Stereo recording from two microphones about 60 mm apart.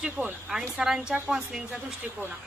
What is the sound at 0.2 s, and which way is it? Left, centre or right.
Speech, right.